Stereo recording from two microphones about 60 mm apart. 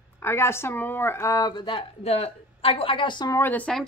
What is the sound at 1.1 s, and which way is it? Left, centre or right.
Speech, left.